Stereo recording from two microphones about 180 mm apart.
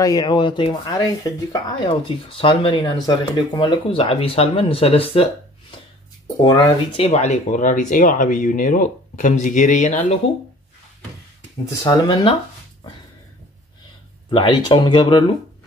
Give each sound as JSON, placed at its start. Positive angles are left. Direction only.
{"t": 0.0, "sound": "speech", "side_deg": 20}
{"t": 6.4, "sound": "speech", "side_deg": 25}
{"t": 11.8, "sound": "speech", "side_deg": 25}
{"t": 14.3, "sound": "speech", "side_deg": 30}